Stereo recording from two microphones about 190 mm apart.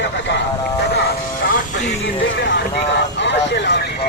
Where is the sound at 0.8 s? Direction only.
60° left (ahead or behind).